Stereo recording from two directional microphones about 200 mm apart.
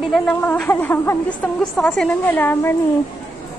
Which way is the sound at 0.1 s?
5° left (ahead or behind).